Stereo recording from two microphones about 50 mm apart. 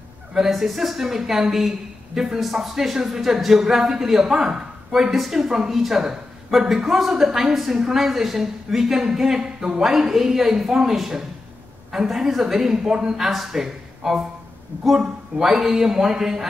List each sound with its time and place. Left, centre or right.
0.5 s a woman's voice: centre